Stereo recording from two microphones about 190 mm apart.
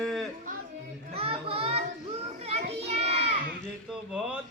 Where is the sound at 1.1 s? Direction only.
30° right (ahead or behind).